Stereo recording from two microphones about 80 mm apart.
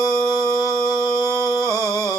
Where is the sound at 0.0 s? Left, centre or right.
Left.